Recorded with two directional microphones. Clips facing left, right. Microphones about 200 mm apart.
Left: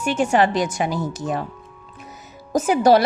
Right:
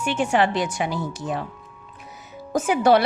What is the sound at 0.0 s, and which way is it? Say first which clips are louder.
Speech: left 3 dB; 40° left (ahead or behind).